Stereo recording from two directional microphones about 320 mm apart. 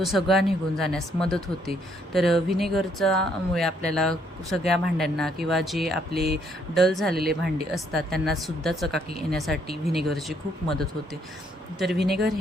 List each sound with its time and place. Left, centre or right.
0.0 s speech: centre
6.1 s speech: right
6.7 s speech: centre